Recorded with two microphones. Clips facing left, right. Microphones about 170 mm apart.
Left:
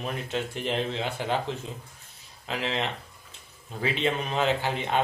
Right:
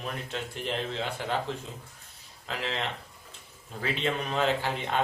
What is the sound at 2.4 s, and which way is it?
Speech, 20° left (ahead or behind).